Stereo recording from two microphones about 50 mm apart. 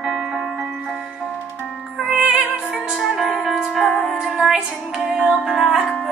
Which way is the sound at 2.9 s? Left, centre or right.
Centre.